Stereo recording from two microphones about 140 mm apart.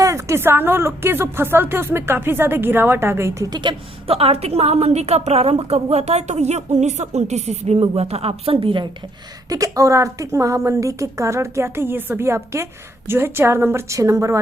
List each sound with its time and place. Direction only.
0.0 s a woman's voice: 20° right (ahead or behind); by 8.9 s 35° right (ahead or behind)
9.5 s a woman's voice: 25° right (ahead or behind)